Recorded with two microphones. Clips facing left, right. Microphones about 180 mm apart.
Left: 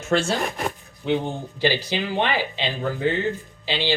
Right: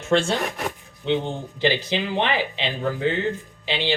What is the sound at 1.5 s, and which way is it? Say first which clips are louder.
Speech: right 1 dB; 20° right (ahead or behind).